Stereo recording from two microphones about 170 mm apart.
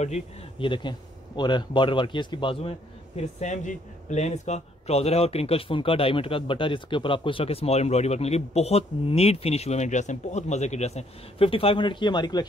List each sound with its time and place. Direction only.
0.0 s speech: 35° left (ahead or behind)
3.2 s speech: 45° left (ahead or behind); by 12.4 s 25° left (ahead or behind)